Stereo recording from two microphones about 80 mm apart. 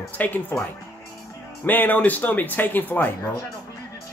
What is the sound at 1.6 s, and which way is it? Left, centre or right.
Speech, left.